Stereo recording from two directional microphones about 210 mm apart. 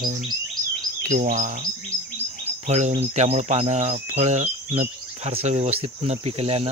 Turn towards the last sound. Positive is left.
turn(degrees=-30)  # may be behind; listen again after turning